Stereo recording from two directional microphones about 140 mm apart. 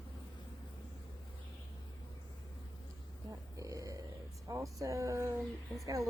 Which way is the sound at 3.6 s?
25° right (ahead or behind).